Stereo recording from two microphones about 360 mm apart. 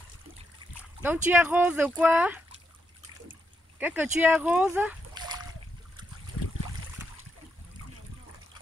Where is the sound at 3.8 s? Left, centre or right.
Centre.